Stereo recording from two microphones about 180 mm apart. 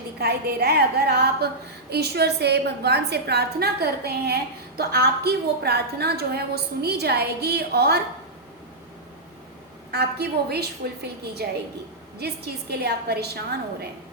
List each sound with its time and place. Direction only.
0.2 s a woman's voice: 60° right (ahead or behind)
9.9 s a woman's voice: 65° right (ahead or behind)
12.7 s a woman's voice: 65° right (ahead or behind)